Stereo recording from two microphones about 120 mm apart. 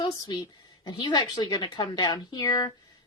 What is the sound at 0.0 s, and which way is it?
A woman's voice, 40° left (ahead or behind).